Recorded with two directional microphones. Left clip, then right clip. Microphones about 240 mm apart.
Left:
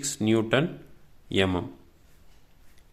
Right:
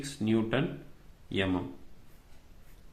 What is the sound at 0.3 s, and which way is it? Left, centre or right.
Speech, left.